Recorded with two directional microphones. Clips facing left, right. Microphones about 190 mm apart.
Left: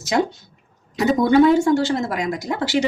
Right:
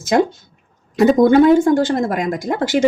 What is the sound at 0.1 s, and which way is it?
Speech, 50° right (ahead or behind).